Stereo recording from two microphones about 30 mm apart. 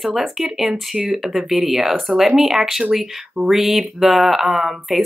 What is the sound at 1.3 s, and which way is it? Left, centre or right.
Speech, centre.